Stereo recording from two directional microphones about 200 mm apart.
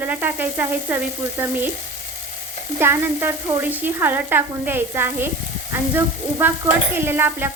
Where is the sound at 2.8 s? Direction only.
10° right (ahead or behind).